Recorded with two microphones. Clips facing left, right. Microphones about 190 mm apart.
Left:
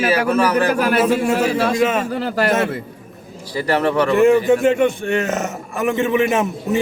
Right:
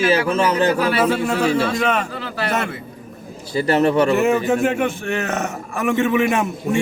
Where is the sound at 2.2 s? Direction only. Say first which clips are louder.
Left 6 dB; 40° left (ahead or behind).